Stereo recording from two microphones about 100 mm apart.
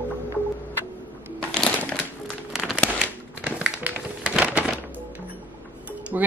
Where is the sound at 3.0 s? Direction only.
15° right (ahead or behind).